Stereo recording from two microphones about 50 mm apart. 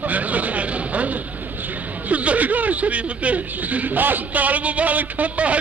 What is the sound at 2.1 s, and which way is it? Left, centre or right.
A man's voice, right.